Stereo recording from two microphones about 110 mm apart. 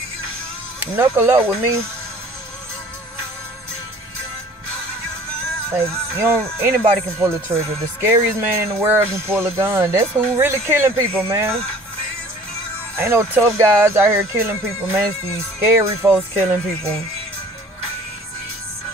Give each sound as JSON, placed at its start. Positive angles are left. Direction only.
{"t": 0.7, "sound": "speech", "side_deg": -15}
{"t": 5.8, "sound": "speech", "side_deg": -25}
{"t": 12.9, "sound": "speech", "side_deg": -25}